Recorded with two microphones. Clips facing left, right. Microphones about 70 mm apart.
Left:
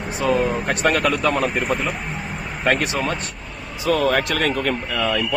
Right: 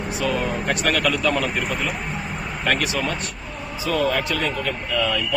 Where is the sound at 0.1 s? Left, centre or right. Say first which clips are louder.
Left 5 dB; left.